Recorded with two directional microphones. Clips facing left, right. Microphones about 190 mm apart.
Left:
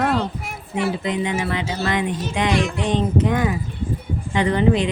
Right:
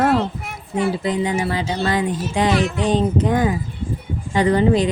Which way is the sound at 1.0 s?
35° right (ahead or behind).